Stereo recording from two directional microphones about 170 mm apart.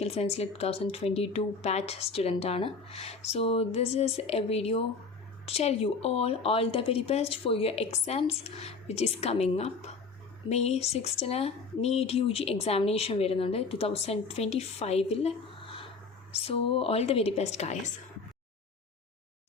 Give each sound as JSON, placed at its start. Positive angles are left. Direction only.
{"t": 0.0, "sound": "speech", "side_deg": 40}